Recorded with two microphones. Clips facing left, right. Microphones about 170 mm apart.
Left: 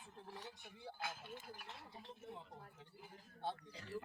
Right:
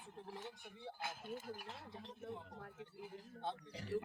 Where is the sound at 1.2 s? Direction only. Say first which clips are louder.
Right 6 dB; 45° right (ahead or behind).